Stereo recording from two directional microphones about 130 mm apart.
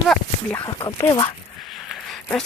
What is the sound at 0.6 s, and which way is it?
Speech, 35° left (ahead or behind).